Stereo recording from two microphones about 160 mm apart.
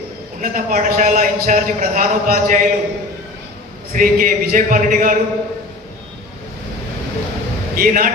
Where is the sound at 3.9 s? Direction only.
60° right (ahead or behind).